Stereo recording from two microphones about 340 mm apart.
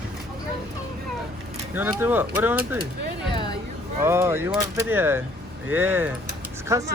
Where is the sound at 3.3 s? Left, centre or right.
Centre.